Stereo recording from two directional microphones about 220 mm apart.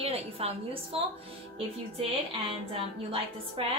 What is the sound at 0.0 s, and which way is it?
A woman's voice, 25° right (ahead or behind).